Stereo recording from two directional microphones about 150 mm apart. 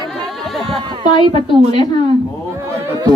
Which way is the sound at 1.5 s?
45° right (ahead or behind).